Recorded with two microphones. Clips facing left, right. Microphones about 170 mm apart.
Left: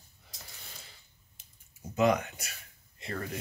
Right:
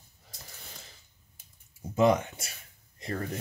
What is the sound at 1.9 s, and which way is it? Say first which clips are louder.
Speech: right 3 dB; 30° right (ahead or behind).